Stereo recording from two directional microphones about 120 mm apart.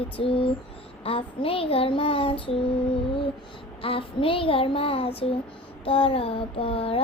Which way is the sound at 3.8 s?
50° left (ahead or behind).